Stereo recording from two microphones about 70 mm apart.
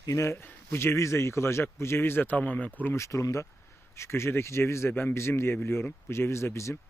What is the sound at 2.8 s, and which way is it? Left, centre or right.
Speech, left.